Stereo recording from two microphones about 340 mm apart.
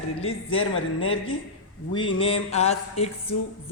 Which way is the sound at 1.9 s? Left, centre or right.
Centre.